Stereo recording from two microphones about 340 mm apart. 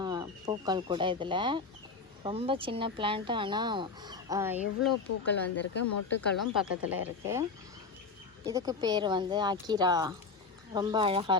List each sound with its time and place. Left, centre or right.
0.0 s speech: centre
5.2 s speech: left
5.8 s speech: left
6.5 s speech: centre
8.4 s speech: centre